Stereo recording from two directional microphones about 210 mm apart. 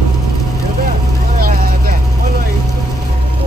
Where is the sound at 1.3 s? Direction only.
45° right (ahead or behind).